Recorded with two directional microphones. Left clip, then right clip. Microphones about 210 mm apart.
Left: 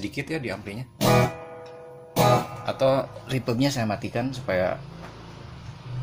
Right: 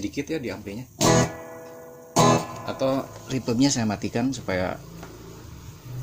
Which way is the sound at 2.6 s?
20° right (ahead or behind).